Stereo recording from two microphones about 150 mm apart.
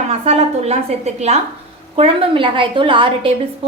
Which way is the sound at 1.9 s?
40° right (ahead or behind).